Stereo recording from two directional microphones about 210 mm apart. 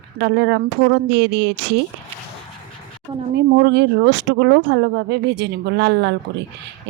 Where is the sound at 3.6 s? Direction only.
55° right (ahead or behind).